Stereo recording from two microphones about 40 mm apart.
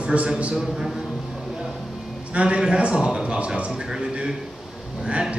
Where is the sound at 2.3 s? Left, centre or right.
Right.